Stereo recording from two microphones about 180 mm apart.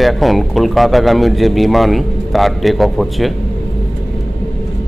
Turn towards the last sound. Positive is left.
turn(degrees=0)  # may be behind; listen again after turning